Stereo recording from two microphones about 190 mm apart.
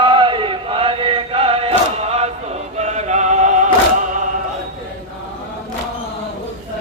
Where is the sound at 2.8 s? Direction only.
35° right (ahead or behind).